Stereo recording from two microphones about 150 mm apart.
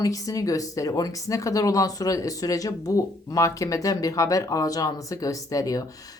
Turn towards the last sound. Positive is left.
turn(degrees=25)  # may be behind; listen again after turning